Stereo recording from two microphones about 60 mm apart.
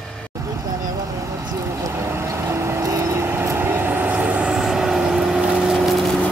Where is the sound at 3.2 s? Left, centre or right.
Right.